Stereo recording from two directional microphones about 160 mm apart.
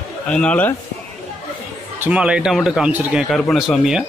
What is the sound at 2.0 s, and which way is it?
A man's voice, 5° right (ahead or behind).